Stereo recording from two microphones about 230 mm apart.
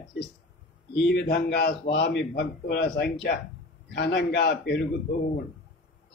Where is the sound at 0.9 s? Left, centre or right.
Left.